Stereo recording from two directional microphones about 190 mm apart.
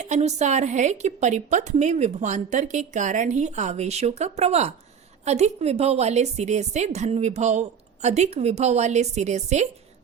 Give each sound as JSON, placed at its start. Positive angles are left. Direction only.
{"t": 0.0, "sound": "a woman's voice", "side_deg": -35}